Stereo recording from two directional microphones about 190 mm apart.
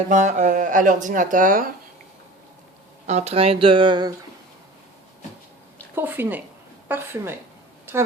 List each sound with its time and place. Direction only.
0.1 s speech: 40° right (ahead or behind)
3.1 s speech: 35° right (ahead or behind)
5.9 s a woman's voice: 10° right (ahead or behind)